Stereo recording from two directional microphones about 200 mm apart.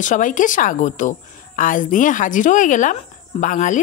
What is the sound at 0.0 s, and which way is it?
A woman's voice, 40° left (ahead or behind).